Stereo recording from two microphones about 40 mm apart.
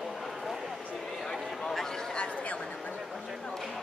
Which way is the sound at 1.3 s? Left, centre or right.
Centre.